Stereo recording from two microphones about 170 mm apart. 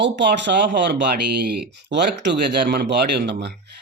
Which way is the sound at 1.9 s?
90° right.